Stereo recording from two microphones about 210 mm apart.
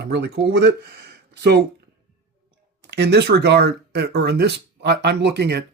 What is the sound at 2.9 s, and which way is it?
Speech, 50° right (ahead or behind).